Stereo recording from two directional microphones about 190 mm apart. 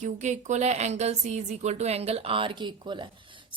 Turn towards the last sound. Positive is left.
turn(degrees=-25)  # may be behind; listen again after turning